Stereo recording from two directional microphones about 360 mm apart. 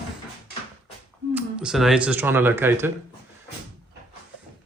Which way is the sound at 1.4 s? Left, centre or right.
Centre.